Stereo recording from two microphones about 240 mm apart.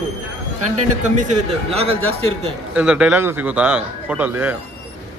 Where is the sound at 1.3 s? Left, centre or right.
Right.